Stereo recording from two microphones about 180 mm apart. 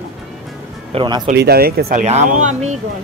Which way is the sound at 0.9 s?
25° right (ahead or behind).